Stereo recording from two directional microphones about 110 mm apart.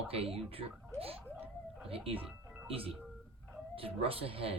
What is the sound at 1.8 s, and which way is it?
Speech, 60° right (ahead or behind).